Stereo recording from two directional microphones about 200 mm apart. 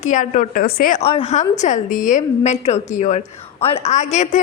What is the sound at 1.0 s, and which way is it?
A woman's voice, 30° left (ahead or behind).